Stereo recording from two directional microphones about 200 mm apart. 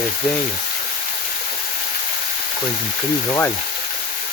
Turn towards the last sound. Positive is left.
turn(degrees=15)  # may be behind; listen again after turning